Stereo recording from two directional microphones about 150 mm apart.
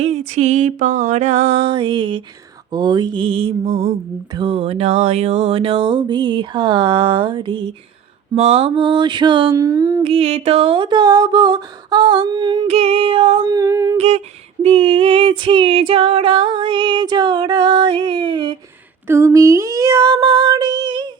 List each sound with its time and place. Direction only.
0.0 s music: 50° right (ahead or behind); by 2.2 s 35° right (ahead or behind)
2.7 s female singing: 30° right (ahead or behind)
9.6 s a sound: 25° right (ahead or behind)
10.0 s female singing: 40° right (ahead or behind)
12.6 s female singing: 45° right (ahead or behind)
13.5 s a sound: 20° right (ahead or behind)
13.9 s music: 45° right (ahead or behind)
14.6 s female singing: 40° right (ahead or behind)
19.0 s a sound: 20° right (ahead or behind)